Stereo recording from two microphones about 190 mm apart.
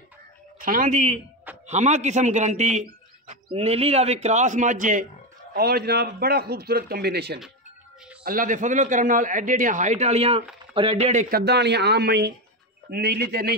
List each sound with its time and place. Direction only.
0.6 s a man's voice: 45° right (ahead or behind)
5.5 s a man's voice: 55° right (ahead or behind)
8.2 s a man's voice: 45° right (ahead or behind)